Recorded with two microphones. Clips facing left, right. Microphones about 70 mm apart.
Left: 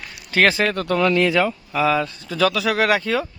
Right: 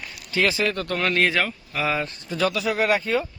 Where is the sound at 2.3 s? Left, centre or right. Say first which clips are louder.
Left 4 dB; left.